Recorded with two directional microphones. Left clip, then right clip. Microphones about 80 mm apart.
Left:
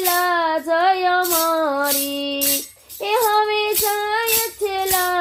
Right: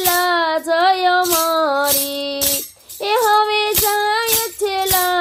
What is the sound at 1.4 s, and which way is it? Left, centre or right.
Music, right.